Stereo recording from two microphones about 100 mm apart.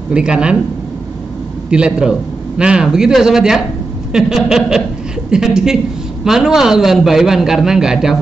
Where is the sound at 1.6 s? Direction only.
10° right (ahead or behind).